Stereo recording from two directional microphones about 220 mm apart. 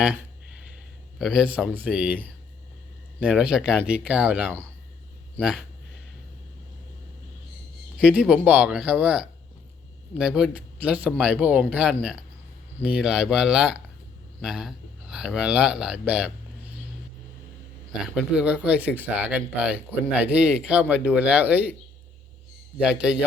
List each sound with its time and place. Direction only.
1.2 s speech: centre (ahead or behind)
3.2 s speech: 5° right (ahead or behind)
7.9 s speech: 5° right (ahead or behind)
18.0 s speech: 5° right (ahead or behind)
22.8 s speech: 5° right (ahead or behind)